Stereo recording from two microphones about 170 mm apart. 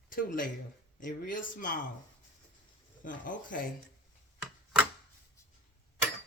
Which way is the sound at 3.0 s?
50° left (ahead or behind).